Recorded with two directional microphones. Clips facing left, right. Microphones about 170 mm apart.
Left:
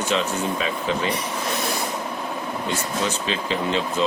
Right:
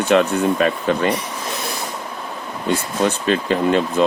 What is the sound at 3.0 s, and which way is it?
Speech, 55° right (ahead or behind).